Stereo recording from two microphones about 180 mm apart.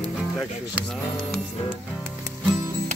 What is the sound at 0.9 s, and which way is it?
Music, 5° left (ahead or behind).